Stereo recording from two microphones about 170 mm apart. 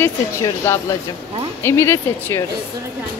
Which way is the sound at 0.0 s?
15° left (ahead or behind).